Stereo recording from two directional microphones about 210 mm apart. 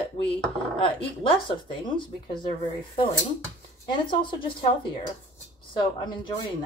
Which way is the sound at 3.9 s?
25° left (ahead or behind).